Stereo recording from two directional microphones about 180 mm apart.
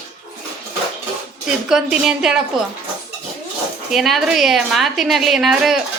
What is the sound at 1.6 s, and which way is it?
Speech, 5° right (ahead or behind).